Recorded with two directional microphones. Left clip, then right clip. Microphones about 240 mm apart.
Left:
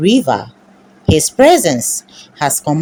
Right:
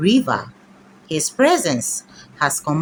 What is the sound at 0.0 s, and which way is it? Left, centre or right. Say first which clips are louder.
A woman's voice: left 5 dB; centre.